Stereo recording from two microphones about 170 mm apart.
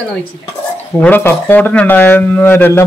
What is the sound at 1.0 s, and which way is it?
A man's voice, 10° left (ahead or behind).